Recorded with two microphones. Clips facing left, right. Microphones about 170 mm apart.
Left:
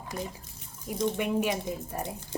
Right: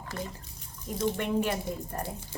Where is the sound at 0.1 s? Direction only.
10° left (ahead or behind).